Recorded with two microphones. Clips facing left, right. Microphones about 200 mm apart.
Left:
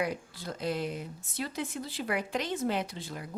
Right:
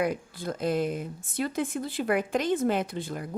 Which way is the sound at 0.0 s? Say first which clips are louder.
Right 5 dB; 50° right (ahead or behind).